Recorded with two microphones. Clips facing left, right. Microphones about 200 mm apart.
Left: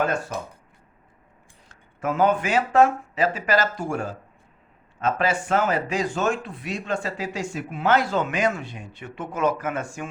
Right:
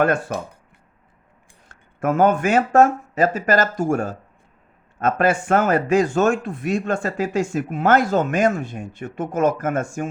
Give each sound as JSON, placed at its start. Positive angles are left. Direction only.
{"t": 0.0, "sound": "speech", "side_deg": -55}
{"t": 1.6, "sound": "speech", "side_deg": -50}